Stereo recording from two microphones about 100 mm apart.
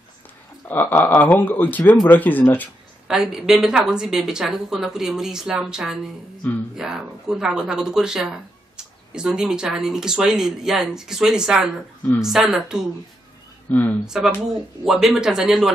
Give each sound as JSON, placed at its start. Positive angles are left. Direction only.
{"t": 0.7, "sound": "speech", "side_deg": 20}
{"t": 3.1, "sound": "a woman's voice", "side_deg": -5}
{"t": 13.7, "sound": "speech", "side_deg": 15}
{"t": 14.0, "sound": "a woman's voice", "side_deg": -5}